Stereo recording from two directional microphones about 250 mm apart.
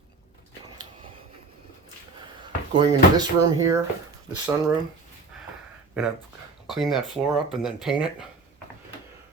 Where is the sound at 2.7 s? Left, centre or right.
Centre.